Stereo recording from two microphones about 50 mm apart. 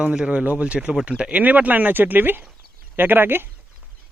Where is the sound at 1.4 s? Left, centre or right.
Right.